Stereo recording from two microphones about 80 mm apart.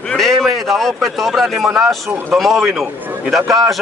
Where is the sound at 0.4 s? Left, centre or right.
Centre.